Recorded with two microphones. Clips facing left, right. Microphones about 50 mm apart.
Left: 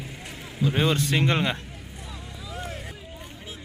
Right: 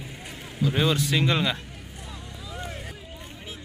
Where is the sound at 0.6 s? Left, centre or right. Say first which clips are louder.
Even; left.